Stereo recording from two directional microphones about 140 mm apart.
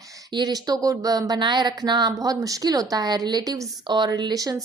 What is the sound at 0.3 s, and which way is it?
A woman's voice, 30° right (ahead or behind).